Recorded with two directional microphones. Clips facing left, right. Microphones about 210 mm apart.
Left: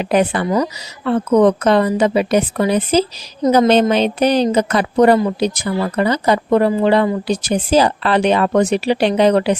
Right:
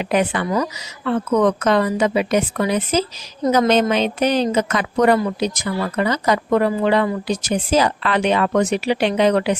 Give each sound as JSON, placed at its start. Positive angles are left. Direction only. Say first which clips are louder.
{"t": 0.0, "sound": "a woman's voice", "louder": "left 3 dB", "side_deg": 35}